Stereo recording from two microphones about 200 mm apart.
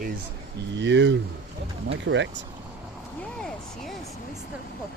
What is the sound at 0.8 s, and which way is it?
Speech, 65° right (ahead or behind).